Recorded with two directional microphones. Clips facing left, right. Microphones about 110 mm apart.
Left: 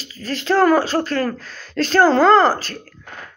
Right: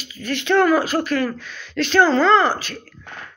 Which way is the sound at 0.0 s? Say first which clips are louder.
Right 1 dB; 35° left (ahead or behind).